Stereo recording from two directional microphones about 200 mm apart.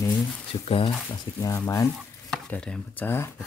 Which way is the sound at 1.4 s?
15° left (ahead or behind).